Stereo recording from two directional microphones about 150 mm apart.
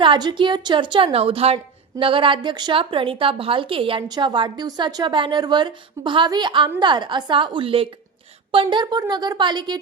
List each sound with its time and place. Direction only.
0.0 s a woman's voice: 30° right (ahead or behind)